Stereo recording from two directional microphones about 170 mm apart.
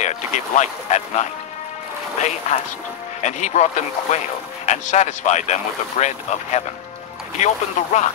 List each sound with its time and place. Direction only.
0.0 s speech: 45° left (ahead or behind)